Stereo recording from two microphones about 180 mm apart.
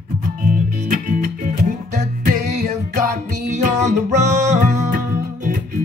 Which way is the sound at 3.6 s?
40° right (ahead or behind).